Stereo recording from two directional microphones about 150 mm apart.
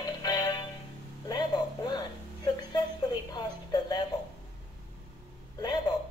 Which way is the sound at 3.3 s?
25° left (ahead or behind).